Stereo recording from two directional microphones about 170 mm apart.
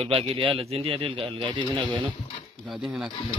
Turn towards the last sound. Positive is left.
turn(degrees=0)  # may be behind; listen again after turning